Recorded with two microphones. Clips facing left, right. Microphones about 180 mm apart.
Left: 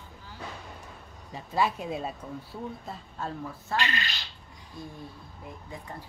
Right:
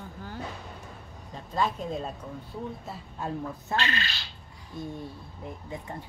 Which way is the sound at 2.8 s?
15° right (ahead or behind).